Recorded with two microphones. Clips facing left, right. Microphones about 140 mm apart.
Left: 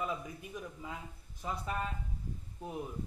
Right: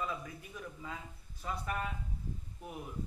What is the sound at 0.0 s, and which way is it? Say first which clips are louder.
A man's voice: left 2 dB; 20° left (ahead or behind).